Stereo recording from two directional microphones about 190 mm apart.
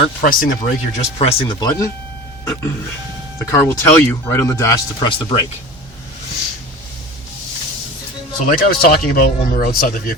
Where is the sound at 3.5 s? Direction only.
15° left (ahead or behind).